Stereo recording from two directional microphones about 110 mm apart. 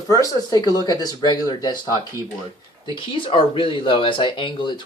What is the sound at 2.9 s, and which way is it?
Speech, 50° left (ahead or behind).